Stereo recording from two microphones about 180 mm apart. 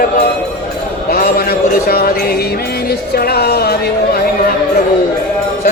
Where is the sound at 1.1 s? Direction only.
55° left (ahead or behind).